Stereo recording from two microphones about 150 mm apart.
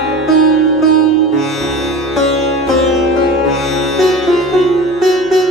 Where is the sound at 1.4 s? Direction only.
Centre (ahead or behind).